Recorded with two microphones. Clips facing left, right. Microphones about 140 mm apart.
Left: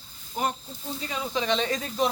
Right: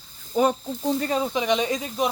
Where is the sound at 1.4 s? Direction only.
15° right (ahead or behind).